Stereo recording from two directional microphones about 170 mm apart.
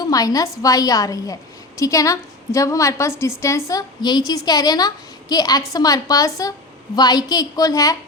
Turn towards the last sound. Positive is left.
turn(degrees=20)  # may be behind; listen again after turning